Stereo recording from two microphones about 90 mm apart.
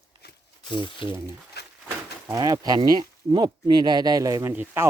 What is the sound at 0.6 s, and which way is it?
Speech, 60° left (ahead or behind).